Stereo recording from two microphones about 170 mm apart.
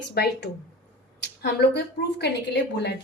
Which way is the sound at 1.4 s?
80° left.